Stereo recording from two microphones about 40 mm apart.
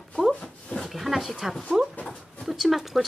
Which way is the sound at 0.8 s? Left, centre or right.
Centre.